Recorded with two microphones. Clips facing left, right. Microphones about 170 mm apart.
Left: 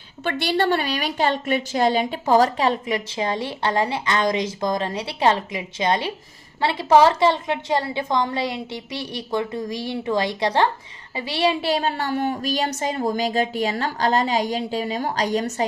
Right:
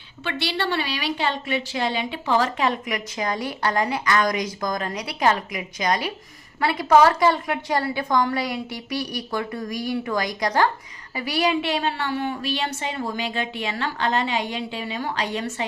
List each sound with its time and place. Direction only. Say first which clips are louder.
0.3 s a woman's voice: left 5 dB; 45° left (ahead or behind)